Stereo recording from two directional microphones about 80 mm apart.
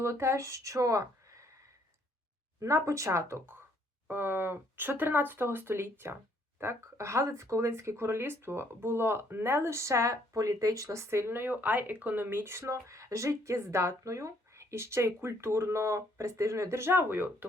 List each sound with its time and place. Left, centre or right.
0.0 s speech: right
2.6 s speech: right